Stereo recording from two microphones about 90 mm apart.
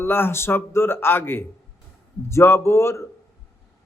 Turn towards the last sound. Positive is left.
turn(degrees=30)  # may be behind; listen again after turning